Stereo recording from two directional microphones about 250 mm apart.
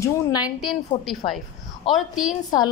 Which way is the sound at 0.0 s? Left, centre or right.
Centre.